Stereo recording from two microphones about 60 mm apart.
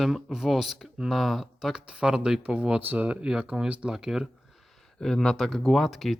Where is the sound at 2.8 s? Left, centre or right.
Right.